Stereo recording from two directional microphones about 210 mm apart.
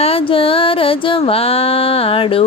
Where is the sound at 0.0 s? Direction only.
25° left (ahead or behind).